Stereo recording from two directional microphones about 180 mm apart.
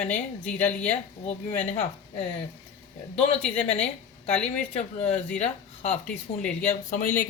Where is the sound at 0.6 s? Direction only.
10° left (ahead or behind).